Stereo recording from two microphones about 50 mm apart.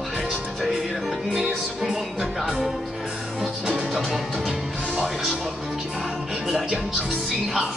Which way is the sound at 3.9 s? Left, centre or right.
Centre.